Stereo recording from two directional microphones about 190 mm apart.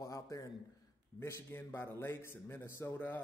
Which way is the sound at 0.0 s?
15° left (ahead or behind).